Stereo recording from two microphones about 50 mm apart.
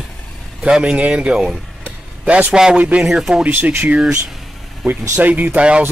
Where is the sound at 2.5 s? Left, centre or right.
Centre.